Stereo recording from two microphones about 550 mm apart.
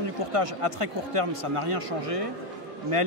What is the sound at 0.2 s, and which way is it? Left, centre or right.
Speech, right.